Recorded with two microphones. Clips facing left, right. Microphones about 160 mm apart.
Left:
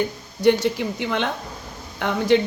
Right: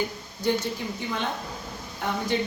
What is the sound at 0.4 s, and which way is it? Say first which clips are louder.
A woman's voice: left 8 dB; 80° left.